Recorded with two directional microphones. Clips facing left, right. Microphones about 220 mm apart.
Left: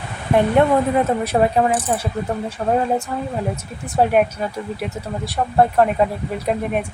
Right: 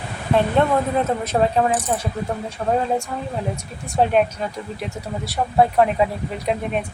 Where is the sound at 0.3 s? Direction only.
10° left (ahead or behind).